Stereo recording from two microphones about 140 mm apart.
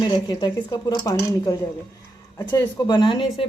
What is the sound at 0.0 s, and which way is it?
A woman's voice, 30° left (ahead or behind).